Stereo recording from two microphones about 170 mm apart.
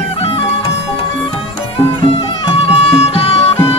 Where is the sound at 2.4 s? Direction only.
35° left (ahead or behind).